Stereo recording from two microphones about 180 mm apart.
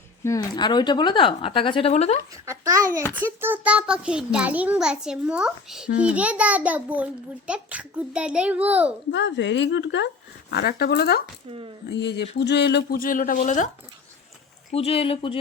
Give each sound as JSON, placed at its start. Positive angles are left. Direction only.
{"t": 0.3, "sound": "a woman's voice", "side_deg": 25}
{"t": 2.3, "sound": "a child's voice", "side_deg": -20}
{"t": 9.1, "sound": "speech", "side_deg": 80}
{"t": 10.5, "sound": "speech", "side_deg": 60}
{"t": 11.4, "sound": "speech", "side_deg": -30}
{"t": 11.9, "sound": "speech", "side_deg": 70}
{"t": 14.7, "sound": "speech", "side_deg": 35}